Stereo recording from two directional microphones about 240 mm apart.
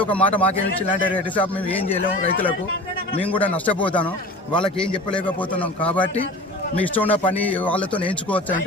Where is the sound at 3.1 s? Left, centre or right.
Left.